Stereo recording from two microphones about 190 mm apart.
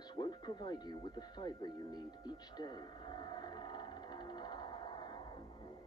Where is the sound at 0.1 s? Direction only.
20° left (ahead or behind).